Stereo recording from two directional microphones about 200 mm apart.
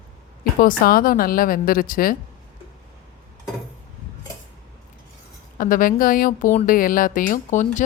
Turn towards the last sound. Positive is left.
turn(degrees=40)  # may be behind; listen again after turning